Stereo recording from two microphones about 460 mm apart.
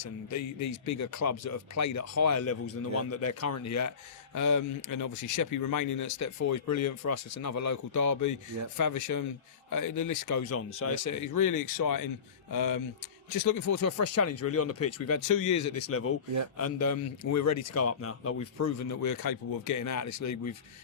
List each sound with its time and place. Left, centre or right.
0.7 s speech: left
15.9 s speech: left